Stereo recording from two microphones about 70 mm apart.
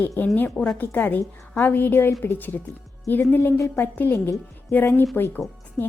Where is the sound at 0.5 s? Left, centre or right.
Centre.